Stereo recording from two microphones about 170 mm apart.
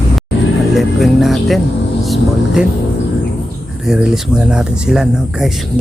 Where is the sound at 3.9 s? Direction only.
5° right (ahead or behind).